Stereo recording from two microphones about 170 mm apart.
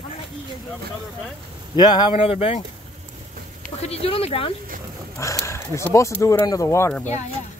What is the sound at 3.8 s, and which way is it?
Speech, 35° left (ahead or behind).